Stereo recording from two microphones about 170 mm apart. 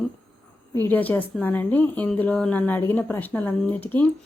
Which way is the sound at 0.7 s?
10° left (ahead or behind).